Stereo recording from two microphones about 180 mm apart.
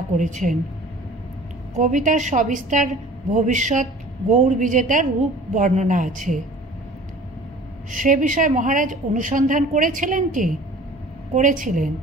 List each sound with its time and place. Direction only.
0.2 s a woman's voice: 45° right (ahead or behind)
1.8 s a woman's voice: 45° right (ahead or behind)
7.9 s a woman's voice: 45° right (ahead or behind)